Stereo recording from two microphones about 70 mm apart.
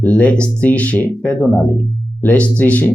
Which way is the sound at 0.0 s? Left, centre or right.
Centre.